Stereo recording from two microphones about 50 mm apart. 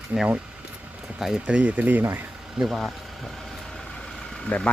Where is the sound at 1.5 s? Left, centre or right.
Right.